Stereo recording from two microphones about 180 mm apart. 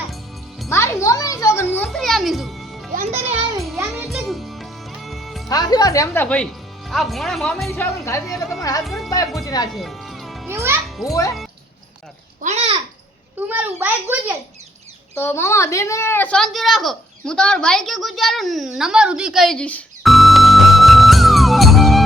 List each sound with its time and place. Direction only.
0.7 s music: 15° left (ahead or behind)
2.9 s music: 40° right (ahead or behind)
3.9 s music: centre (ahead or behind)
5.5 s a woman's voice: 20° left (ahead or behind)
6.2 s speech: 5° left (ahead or behind)
7.7 s a woman's voice: 15° left (ahead or behind)
8.3 s a woman's voice: centre (ahead or behind)
9.0 s a woman's voice: 20° left (ahead or behind)
9.7 s music: centre (ahead or behind)
10.5 s a child's voice: 15° right (ahead or behind)
11.0 s a woman's voice: 20° left (ahead or behind)
12.4 s babbling: 40° right (ahead or behind)
13.5 s a child's voice: 10° right (ahead or behind)
15.2 s speech: 15° left (ahead or behind)